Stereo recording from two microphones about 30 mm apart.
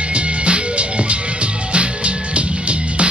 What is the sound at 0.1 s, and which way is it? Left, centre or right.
Music, right.